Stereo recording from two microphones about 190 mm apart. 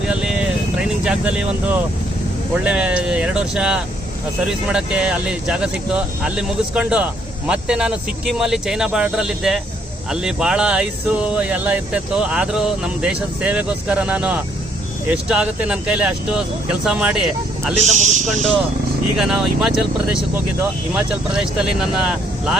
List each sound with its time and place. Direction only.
0.1 s vehicle: 5° right (ahead or behind)
2.6 s speech: 5° right (ahead or behind)
17.7 s a man's voice: 40° right (ahead or behind)
19.1 s speech: centre (ahead or behind)